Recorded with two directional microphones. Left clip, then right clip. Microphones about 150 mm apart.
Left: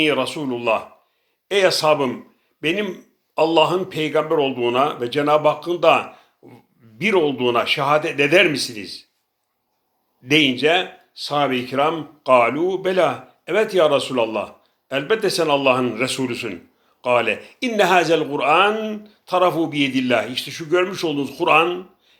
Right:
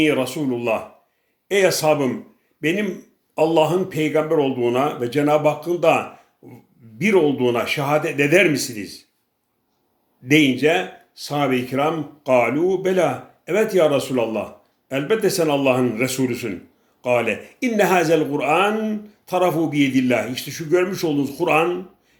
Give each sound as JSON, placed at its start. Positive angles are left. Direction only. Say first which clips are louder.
{"t": 0.0, "sound": "speech", "louder": "even", "side_deg": -25}
{"t": 10.2, "sound": "speech", "louder": "even", "side_deg": -25}